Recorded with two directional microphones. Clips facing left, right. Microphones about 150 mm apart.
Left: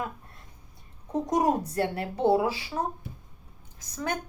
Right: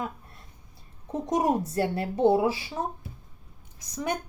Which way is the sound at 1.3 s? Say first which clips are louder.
Right 1 dB; 25° right (ahead or behind).